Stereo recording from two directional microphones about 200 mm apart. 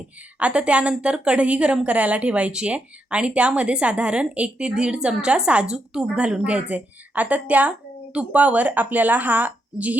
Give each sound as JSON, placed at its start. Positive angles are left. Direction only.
{"t": 0.3, "sound": "a woman's voice", "side_deg": -5}